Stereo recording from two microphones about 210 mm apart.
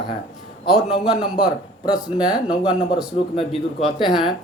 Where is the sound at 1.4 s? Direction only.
25° left (ahead or behind).